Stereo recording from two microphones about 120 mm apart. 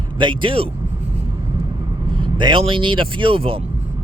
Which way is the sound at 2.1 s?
45° right (ahead or behind).